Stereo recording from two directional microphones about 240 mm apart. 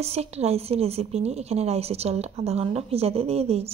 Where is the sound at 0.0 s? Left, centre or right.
Right.